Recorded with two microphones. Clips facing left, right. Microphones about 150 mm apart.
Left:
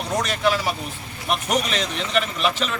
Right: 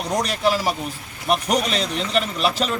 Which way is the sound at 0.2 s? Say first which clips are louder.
Even; 35° right (ahead or behind).